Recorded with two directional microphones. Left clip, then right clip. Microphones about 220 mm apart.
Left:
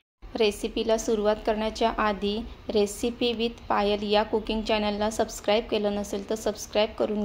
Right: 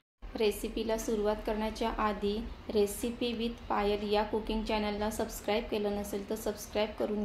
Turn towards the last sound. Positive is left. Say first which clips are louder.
# left 8 dB
turn(degrees=35)  # may be behind; listen again after turning